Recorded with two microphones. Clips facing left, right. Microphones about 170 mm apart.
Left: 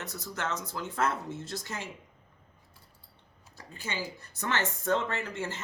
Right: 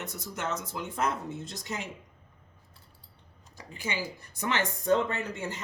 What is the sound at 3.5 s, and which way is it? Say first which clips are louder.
Speech: right 2 dB; 15° right (ahead or behind).